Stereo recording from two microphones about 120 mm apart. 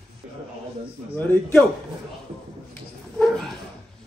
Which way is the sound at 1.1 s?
15° left (ahead or behind).